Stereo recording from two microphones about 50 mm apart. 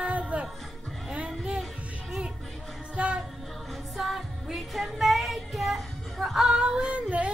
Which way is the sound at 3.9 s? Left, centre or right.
Centre.